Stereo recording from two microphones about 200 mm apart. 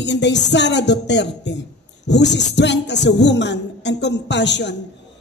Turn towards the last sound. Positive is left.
turn(degrees=60)  # may be behind; listen again after turning